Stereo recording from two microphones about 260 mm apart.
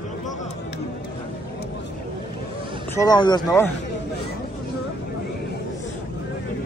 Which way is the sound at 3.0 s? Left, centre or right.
Centre.